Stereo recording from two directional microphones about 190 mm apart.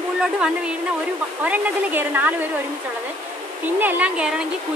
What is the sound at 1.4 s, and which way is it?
Speech, 10° right (ahead or behind).